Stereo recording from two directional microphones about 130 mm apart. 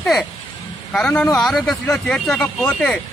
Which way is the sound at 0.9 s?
5° left (ahead or behind).